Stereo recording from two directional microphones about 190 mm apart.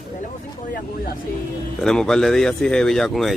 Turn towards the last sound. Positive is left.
turn(degrees=0)  # may be behind; listen again after turning